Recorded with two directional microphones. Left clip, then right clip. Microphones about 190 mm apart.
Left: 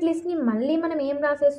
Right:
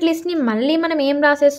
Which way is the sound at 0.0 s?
30° right (ahead or behind).